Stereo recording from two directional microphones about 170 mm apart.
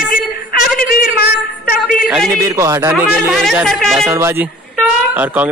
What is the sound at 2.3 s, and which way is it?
Speech, 20° right (ahead or behind).